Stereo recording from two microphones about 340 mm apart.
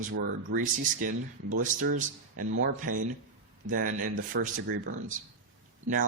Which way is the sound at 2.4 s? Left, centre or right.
Right.